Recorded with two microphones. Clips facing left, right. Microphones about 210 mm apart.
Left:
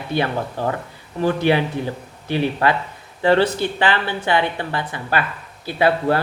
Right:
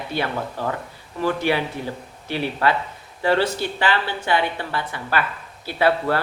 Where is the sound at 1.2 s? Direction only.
20° left (ahead or behind).